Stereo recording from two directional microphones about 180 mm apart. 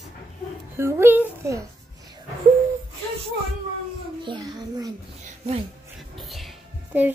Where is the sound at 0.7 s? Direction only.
15° right (ahead or behind).